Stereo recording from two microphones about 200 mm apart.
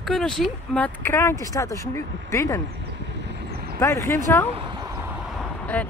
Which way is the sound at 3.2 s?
50° right (ahead or behind).